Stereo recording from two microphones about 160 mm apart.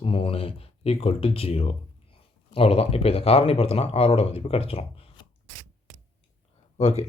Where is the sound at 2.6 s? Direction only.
40° left (ahead or behind).